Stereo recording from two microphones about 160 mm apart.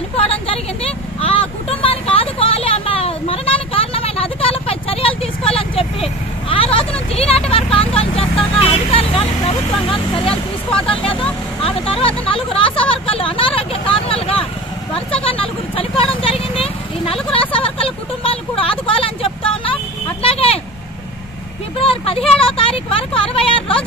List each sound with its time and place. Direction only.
0.1 s vehicle: 35° left (ahead or behind)
10.7 s a sound: 35° left (ahead or behind)
15.1 s vehicle: 35° left (ahead or behind)
21.7 s vehicle: 35° left (ahead or behind)